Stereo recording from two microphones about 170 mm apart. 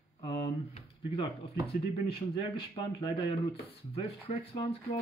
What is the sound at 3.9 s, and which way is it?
Speech, 35° left (ahead or behind).